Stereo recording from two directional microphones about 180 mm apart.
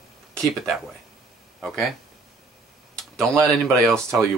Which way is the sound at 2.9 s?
5° left (ahead or behind).